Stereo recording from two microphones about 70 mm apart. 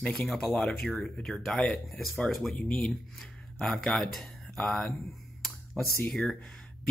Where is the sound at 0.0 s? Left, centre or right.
Centre.